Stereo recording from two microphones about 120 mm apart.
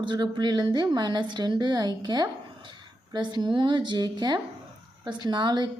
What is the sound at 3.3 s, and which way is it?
A woman's voice, 40° right (ahead or behind).